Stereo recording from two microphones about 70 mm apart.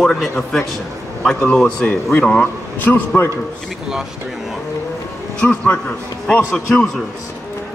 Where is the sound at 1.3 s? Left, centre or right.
Centre.